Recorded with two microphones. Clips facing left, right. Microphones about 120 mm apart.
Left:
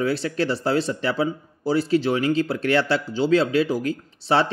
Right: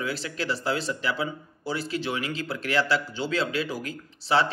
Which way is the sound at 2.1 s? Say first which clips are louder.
Left 9 dB; 50° left (ahead or behind).